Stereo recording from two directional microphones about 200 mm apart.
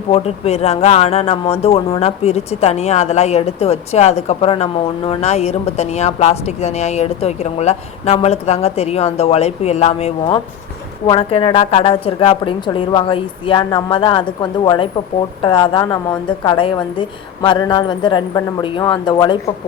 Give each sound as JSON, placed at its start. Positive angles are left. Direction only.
{"t": 0.1, "sound": "speech", "side_deg": 30}
{"t": 11.1, "sound": "a woman's voice", "side_deg": 25}